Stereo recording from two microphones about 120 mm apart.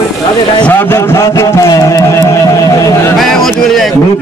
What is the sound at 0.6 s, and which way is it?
Speech, 15° left (ahead or behind).